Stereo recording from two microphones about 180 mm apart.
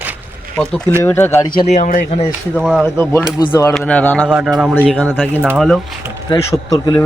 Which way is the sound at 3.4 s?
25° left (ahead or behind).